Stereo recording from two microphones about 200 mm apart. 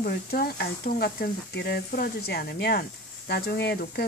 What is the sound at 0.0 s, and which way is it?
Speech, 50° left (ahead or behind).